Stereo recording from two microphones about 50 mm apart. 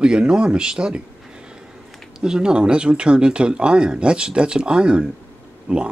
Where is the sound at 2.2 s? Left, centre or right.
Centre.